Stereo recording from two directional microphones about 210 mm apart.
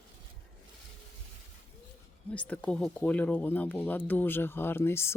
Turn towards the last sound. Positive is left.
turn(degrees=10)  # may be behind; listen again after turning